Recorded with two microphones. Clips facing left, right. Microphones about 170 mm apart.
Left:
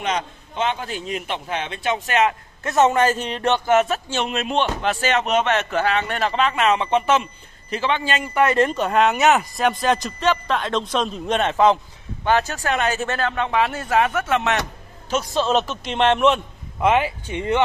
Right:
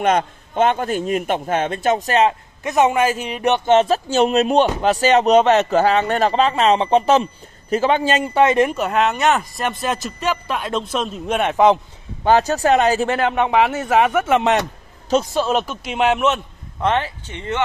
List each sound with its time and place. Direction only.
0.0 s a man's voice: 50° right (ahead or behind); by 2.3 s 35° right (ahead or behind)
2.6 s a man's voice: 15° right (ahead or behind); by 8.2 s 40° right (ahead or behind)
8.2 s speech: 25° right (ahead or behind)
8.7 s speech: centre (ahead or behind)
12.3 s a man's voice: 35° right (ahead or behind)
13.2 s speech: 15° right (ahead or behind)
15.3 s speech: 10° right (ahead or behind)
16.8 s speech: 10° left (ahead or behind)